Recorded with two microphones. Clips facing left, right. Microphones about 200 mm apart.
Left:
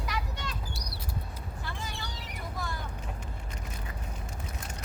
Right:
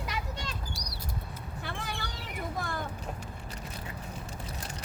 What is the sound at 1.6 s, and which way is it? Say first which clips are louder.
Vehicle: right 3 dB; 60° right (ahead or behind).